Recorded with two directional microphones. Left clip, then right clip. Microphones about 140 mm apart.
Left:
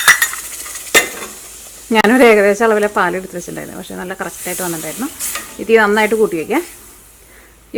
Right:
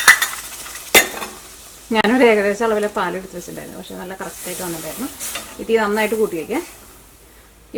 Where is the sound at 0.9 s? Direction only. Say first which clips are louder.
Left 1 dB; 5° right (ahead or behind).